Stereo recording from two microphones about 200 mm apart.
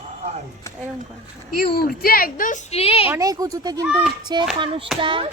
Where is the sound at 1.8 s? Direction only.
45° left (ahead or behind); by 3.0 s 30° left (ahead or behind).